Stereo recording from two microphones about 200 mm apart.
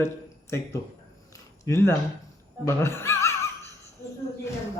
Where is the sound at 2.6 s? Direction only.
15° left (ahead or behind).